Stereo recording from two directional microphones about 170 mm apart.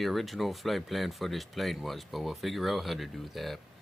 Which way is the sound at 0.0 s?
Centre (ahead or behind).